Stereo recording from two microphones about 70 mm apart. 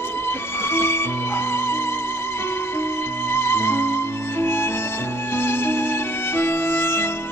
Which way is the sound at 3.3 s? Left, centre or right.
Left.